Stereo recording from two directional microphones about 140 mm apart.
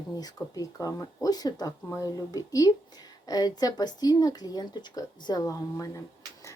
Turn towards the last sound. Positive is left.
turn(degrees=25)  # may be behind; listen again after turning